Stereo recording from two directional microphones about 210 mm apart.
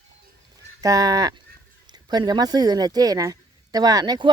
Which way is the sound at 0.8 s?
15° right (ahead or behind).